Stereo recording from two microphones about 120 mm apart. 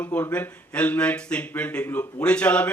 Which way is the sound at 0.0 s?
15° left (ahead or behind).